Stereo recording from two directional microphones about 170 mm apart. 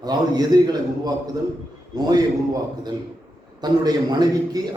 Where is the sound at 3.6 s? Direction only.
25° right (ahead or behind).